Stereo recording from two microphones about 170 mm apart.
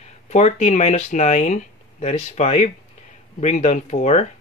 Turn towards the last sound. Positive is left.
turn(degrees=40)  # may be behind; listen again after turning